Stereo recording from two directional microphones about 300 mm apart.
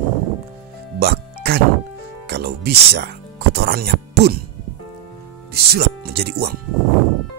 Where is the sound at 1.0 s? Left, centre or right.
Right.